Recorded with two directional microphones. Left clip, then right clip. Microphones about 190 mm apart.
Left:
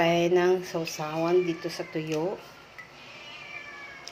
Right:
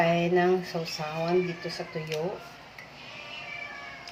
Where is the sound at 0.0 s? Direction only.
40° left (ahead or behind).